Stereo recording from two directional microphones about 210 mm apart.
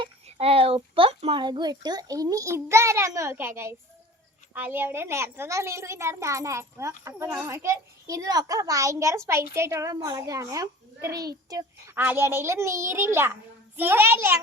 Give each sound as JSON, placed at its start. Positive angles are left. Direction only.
{"t": 0.0, "sound": "a child's voice", "side_deg": -30}